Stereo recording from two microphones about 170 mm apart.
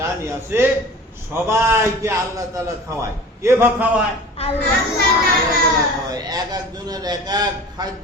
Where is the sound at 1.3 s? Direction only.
15° right (ahead or behind).